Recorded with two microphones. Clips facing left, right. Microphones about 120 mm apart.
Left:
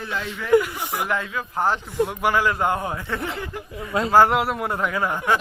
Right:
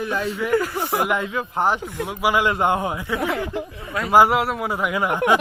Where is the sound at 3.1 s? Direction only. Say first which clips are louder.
Right 6 dB; 90° right.